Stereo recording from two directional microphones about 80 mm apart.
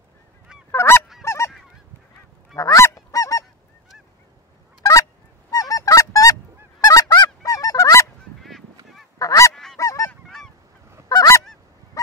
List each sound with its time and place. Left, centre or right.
0.7 s goose: left
2.5 s goose: left
5.5 s honk: left
8.4 s goose: centre
9.2 s goose: left
9.5 s goose: centre
9.8 s goose: left
10.2 s goose: centre
11.1 s goose: left